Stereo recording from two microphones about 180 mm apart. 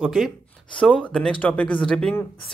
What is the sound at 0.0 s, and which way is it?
Speech, centre (ahead or behind).